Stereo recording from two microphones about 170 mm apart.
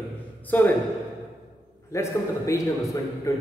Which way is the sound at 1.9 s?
15° left (ahead or behind).